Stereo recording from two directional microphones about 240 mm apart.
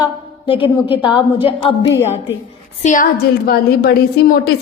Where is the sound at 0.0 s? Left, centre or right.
Left.